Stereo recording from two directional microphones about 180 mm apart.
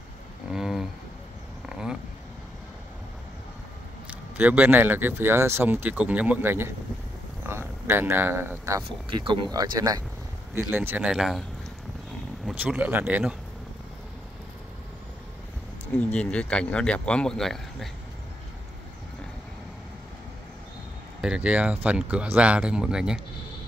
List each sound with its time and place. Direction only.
0.5 s a sound: centre (ahead or behind)
1.7 s vehicle: 5° right (ahead or behind)
4.1 s a man's voice: 10° right (ahead or behind)
8.8 s a man's voice: 25° right (ahead or behind); by 11.4 s centre (ahead or behind)
12.4 s a man's voice: 10° right (ahead or behind)
16.1 s speech: 5° left (ahead or behind)
21.2 s speech: 5° right (ahead or behind)